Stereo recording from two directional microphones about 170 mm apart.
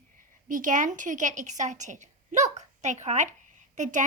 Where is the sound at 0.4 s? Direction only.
50° right (ahead or behind).